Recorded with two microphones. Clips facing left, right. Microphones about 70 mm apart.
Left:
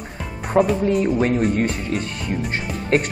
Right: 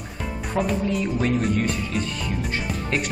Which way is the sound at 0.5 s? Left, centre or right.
Left.